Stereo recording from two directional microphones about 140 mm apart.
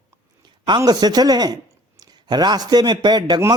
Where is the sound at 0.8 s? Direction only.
30° right (ahead or behind).